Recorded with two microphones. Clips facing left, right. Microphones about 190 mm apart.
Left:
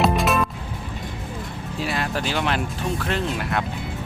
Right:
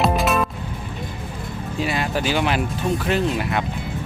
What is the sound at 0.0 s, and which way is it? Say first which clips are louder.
Music: right 1 dB; centre (ahead or behind).